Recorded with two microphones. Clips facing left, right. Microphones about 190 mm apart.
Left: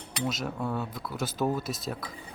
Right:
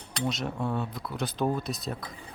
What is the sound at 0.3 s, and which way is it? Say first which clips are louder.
Speech: right 1 dB; centre (ahead or behind).